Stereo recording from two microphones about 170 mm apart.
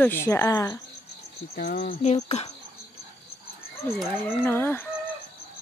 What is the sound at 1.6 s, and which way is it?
Cricket, 65° left (ahead or behind).